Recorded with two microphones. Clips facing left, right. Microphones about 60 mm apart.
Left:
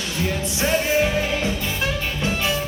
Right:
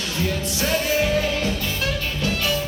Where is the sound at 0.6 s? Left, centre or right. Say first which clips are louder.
Left 2 dB; left.